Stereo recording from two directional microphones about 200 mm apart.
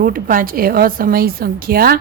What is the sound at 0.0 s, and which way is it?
A woman's voice, 45° right (ahead or behind).